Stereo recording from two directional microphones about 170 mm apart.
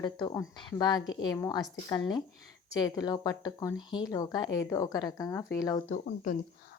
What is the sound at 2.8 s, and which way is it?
A woman's voice, 25° left (ahead or behind).